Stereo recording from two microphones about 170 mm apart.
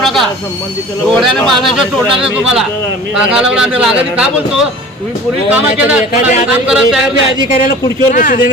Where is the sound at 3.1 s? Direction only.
5° right (ahead or behind).